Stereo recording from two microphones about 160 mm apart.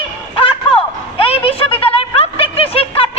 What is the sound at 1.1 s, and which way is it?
Snicker, 35° left (ahead or behind).